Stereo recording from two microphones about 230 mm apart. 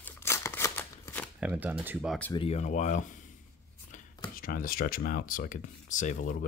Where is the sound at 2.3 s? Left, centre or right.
Left.